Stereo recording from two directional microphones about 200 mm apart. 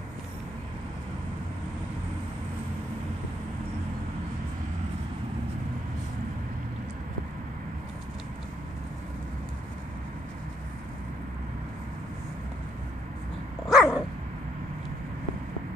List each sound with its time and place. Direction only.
13.7 s dog: 5° right (ahead or behind)